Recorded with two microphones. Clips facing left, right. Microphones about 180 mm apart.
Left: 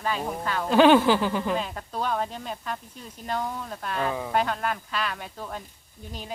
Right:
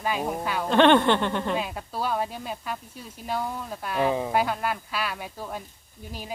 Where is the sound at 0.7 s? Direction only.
5° left (ahead or behind).